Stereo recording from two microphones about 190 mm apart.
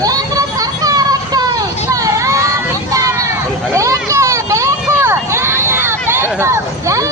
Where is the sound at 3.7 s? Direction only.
15° right (ahead or behind).